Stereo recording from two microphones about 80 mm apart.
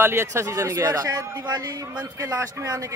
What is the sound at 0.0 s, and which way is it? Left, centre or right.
Speech, right.